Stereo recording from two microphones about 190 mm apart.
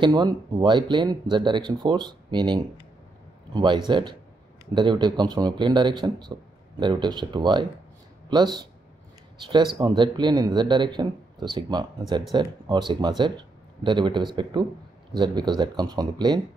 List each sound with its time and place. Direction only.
0.0 s speech: 20° right (ahead or behind)
9.8 s speech: 20° right (ahead or behind)